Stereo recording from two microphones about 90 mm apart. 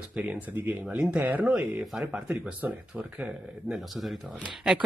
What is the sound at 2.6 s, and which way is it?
Speech, 15° right (ahead or behind).